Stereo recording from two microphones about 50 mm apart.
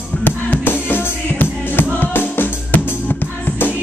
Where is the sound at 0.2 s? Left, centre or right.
Left.